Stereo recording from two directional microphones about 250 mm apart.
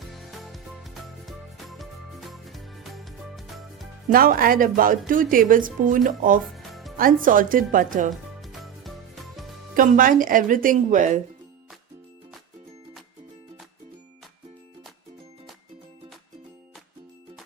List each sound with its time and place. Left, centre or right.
0.0 s music: centre
4.1 s a woman's voice: right
6.4 s music: centre
6.9 s a woman's voice: right
8.1 s music: centre
9.7 s a woman's voice: right